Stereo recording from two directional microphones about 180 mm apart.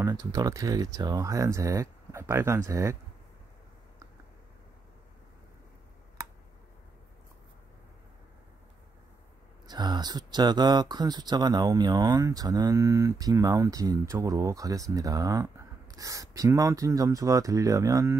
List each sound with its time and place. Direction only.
0.0 s speech: 25° right (ahead or behind)
9.7 s speech: 20° right (ahead or behind)